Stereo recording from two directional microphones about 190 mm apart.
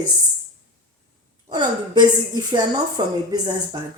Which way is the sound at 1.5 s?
20° right (ahead or behind).